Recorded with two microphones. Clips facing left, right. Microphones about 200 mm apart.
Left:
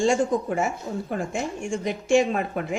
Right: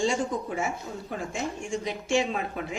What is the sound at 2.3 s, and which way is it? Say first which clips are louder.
Speech: left 5 dB; 50° left (ahead or behind).